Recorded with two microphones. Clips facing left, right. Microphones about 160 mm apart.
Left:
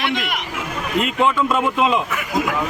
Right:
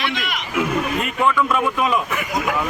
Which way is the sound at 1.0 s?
20° left (ahead or behind).